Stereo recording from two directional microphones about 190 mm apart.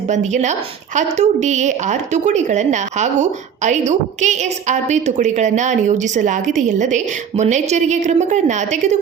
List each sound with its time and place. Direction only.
0.1 s speech: 40° right (ahead or behind)